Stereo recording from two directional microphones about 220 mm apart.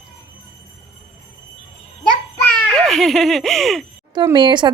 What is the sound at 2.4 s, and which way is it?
A child's voice, 5° left (ahead or behind).